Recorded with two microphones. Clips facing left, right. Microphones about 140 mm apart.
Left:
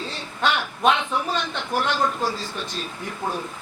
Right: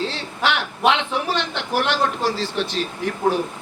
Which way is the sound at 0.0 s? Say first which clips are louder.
Right 2 dB; 85° right.